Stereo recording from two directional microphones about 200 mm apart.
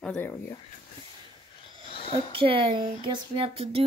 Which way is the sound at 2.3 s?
25° right (ahead or behind).